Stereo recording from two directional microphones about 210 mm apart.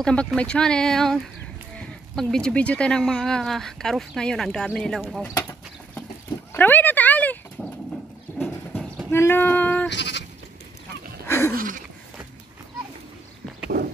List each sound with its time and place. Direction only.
0.0 s speech: 5° left (ahead or behind)
6.5 s dog: 10° left (ahead or behind)
8.4 s horse: centre (ahead or behind)
9.1 s female singing: 10° left (ahead or behind)
9.8 s sheep: 55° left (ahead or behind)
11.2 s a sound: 10° left (ahead or behind)
11.5 s a sound: 40° right (ahead or behind)